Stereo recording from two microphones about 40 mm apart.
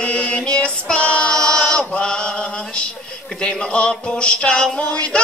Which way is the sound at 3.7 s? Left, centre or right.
Left.